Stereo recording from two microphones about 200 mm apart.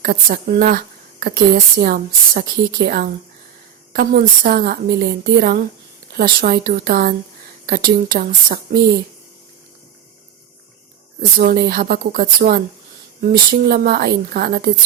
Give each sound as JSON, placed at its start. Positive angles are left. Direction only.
{"t": 0.0, "sound": "a woman's voice", "side_deg": -45}
{"t": 11.3, "sound": "a woman's voice", "side_deg": -50}